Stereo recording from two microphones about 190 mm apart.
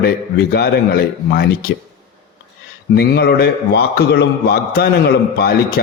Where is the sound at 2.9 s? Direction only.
55° left (ahead or behind).